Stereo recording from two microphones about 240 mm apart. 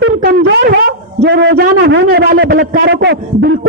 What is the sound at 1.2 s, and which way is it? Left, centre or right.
A man's voice, right.